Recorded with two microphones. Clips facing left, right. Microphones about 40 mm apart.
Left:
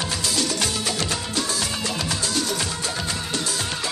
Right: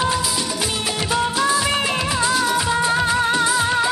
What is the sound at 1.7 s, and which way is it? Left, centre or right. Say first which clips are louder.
Music: right 7 dB; right.